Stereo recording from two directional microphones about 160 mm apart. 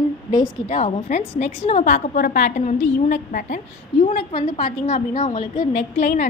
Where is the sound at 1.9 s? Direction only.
60° left (ahead or behind).